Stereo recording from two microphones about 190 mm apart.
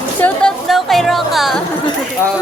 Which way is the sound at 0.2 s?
5° left (ahead or behind).